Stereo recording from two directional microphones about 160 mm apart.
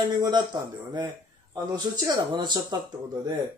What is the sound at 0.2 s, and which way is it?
A man's voice, 25° right (ahead or behind).